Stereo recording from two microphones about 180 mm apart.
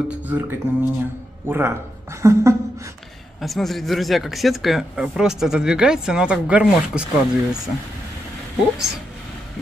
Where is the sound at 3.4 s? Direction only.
Centre (ahead or behind).